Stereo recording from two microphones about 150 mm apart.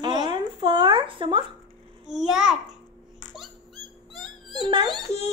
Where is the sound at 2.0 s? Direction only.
5° right (ahead or behind).